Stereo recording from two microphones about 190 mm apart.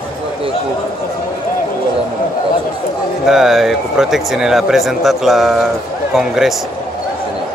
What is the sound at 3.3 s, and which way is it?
A man's voice, centre (ahead or behind).